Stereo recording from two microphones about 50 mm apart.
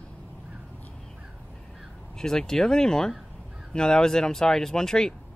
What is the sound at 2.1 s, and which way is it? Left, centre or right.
Speech, centre.